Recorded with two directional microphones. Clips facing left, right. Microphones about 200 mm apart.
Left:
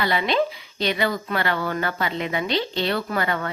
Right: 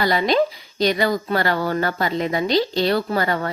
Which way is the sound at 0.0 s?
40° right (ahead or behind).